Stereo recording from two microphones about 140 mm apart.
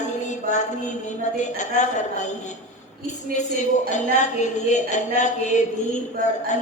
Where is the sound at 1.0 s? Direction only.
60° left (ahead or behind).